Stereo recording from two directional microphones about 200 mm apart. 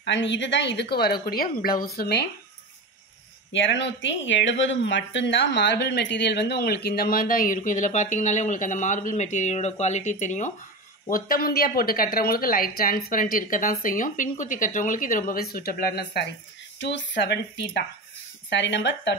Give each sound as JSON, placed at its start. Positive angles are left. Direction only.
{"t": 0.0, "sound": "speech", "side_deg": 65}
{"t": 3.5, "sound": "speech", "side_deg": 65}